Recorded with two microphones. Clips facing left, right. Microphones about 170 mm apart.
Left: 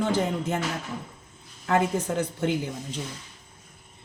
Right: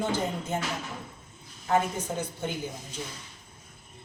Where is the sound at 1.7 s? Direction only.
90° left.